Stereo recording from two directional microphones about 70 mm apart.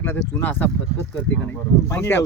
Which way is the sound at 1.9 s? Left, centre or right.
Left.